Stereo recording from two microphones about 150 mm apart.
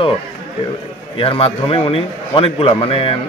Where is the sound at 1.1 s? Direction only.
40° left (ahead or behind).